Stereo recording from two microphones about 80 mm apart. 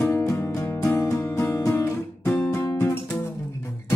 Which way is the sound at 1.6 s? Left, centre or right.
Left.